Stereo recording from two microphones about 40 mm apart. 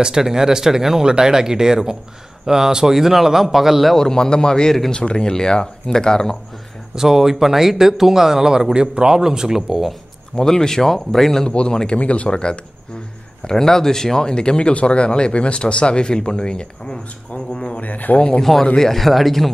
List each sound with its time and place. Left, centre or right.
0.0 s speech: centre
3.9 s speech: centre
7.0 s speech: centre
10.3 s speech: centre
11.4 s speech: left
13.5 s speech: centre
17.7 s speech: left
18.4 s speech: centre